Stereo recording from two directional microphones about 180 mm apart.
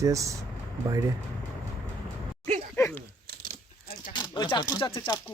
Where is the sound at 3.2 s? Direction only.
50° right (ahead or behind).